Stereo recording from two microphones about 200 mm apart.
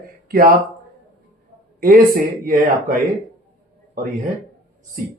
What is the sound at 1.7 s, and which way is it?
Speech, 45° right (ahead or behind).